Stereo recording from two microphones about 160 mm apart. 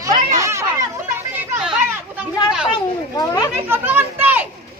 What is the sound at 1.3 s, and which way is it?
Chatter, 5° right (ahead or behind).